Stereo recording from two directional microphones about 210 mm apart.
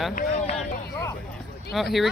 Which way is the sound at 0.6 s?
10° left (ahead or behind).